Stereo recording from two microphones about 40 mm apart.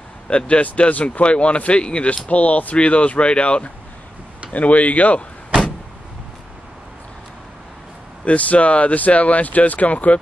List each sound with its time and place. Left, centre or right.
0.5 s speech: left
8.3 s speech: left